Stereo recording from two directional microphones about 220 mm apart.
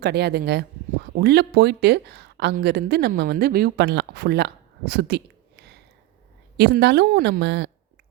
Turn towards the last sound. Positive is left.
turn(degrees=-55)  # may be behind; listen again after turning